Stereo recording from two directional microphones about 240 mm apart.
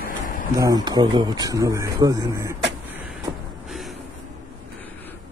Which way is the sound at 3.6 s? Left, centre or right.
Centre.